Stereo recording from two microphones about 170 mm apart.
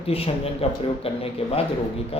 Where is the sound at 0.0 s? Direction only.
35° left (ahead or behind).